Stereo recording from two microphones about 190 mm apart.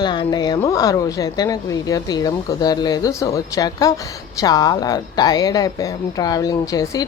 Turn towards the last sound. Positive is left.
turn(degrees=20)  # may be behind; listen again after turning